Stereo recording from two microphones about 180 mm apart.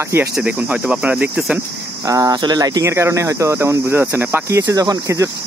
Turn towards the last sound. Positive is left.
turn(degrees=-20)  # may be behind; listen again after turning